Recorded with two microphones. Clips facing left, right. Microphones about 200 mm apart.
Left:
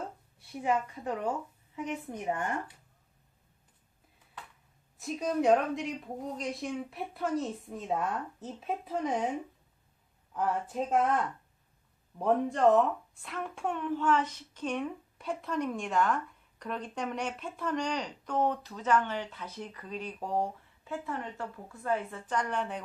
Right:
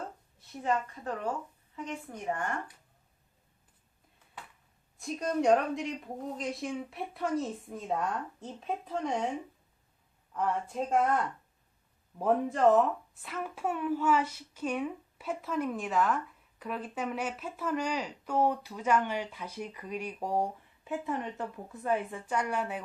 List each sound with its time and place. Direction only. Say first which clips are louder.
0.3 s a woman's voice: left 1 dB; 10° left (ahead or behind)
4.9 s a woman's voice: even; centre (ahead or behind)
10.3 s a woman's voice: even; centre (ahead or behind)